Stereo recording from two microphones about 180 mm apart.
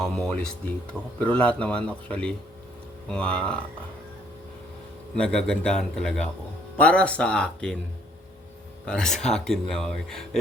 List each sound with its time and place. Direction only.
0.0 s a man's voice: 5° left (ahead or behind)
5.1 s speech: 5° left (ahead or behind)
8.9 s speech: 5° left (ahead or behind)